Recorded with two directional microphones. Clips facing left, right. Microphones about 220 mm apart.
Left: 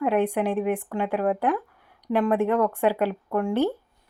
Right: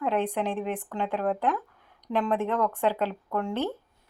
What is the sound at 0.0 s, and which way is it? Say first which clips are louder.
Speech: left 4 dB; 10° left (ahead or behind).